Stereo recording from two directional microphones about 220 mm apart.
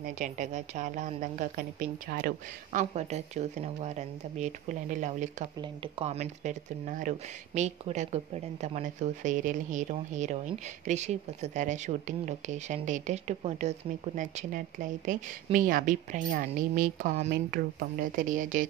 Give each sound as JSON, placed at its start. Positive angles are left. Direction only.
{"t": 0.0, "sound": "speech", "side_deg": -35}